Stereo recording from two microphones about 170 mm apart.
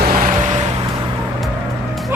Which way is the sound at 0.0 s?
60° right (ahead or behind).